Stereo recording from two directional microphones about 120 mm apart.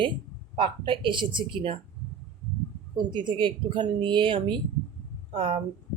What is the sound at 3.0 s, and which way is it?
A woman's voice, 40° right (ahead or behind).